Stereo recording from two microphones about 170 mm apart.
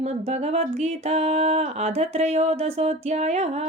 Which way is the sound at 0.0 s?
40° right (ahead or behind).